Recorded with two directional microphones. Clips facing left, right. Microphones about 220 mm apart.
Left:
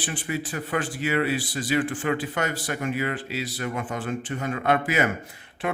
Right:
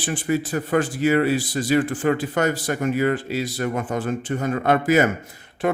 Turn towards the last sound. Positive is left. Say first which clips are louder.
# right 6 dB
turn(degrees=-40)  # may be behind; listen again after turning